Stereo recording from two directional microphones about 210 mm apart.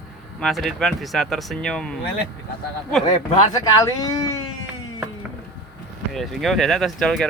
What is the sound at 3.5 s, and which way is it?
Speech, 15° left (ahead or behind).